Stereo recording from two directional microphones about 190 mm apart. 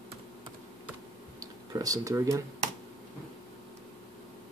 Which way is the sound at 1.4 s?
20° right (ahead or behind).